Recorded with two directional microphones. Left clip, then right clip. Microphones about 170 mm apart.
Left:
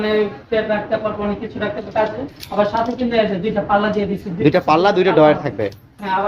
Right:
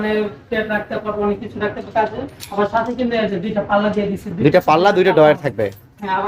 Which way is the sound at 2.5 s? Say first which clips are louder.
Left 2 dB; 5° left (ahead or behind).